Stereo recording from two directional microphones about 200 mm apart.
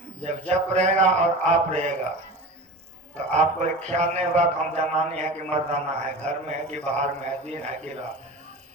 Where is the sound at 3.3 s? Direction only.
35° right (ahead or behind).